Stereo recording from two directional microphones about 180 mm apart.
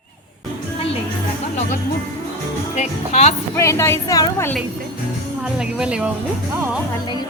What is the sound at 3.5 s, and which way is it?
A woman's voice, 15° left (ahead or behind).